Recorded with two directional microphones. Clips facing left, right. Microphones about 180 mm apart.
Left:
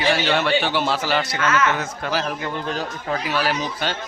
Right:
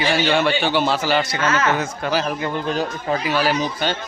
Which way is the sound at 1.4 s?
30° right (ahead or behind).